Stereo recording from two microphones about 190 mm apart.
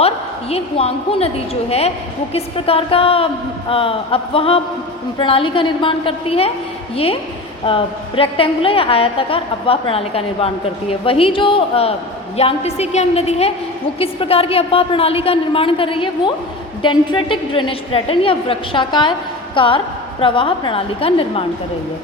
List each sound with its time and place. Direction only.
0.5 s a woman's voice: 30° left (ahead or behind)
2.3 s a woman's voice: 30° left (ahead or behind)